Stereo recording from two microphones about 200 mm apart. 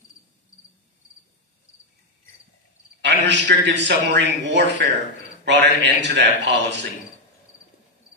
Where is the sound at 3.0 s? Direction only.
60° right (ahead or behind).